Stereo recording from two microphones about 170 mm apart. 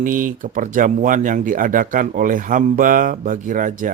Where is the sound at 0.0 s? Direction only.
50° right (ahead or behind).